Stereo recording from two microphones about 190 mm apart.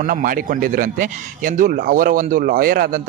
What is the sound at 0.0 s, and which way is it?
A man's voice, 45° right (ahead or behind).